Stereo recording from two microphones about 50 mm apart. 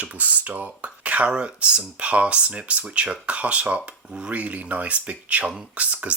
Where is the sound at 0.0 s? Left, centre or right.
Right.